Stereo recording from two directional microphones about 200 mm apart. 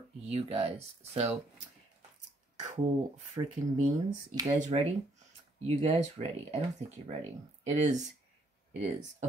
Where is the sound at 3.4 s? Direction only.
20° right (ahead or behind).